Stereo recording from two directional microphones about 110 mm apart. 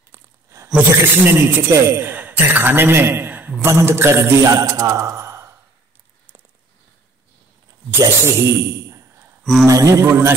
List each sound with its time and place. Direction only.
0.1 s a sound: 25° right (ahead or behind)
0.7 s speech: 20° right (ahead or behind)
8.0 s speech: 25° right (ahead or behind)
9.4 s speech: centre (ahead or behind)
9.7 s speech: 30° right (ahead or behind)